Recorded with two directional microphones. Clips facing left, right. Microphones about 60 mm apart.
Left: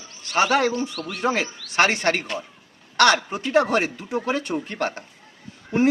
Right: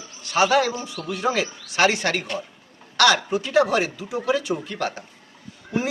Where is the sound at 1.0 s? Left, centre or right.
Left.